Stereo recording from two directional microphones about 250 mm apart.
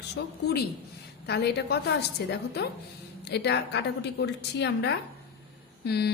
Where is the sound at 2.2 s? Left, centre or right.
Left.